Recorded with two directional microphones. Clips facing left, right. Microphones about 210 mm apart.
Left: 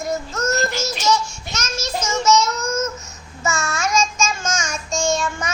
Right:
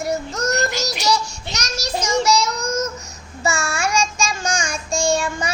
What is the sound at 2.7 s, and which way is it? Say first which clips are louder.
Babbling: even; 35° right (ahead or behind).